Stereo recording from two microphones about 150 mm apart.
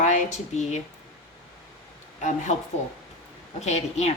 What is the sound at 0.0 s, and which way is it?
Speech, 55° left (ahead or behind).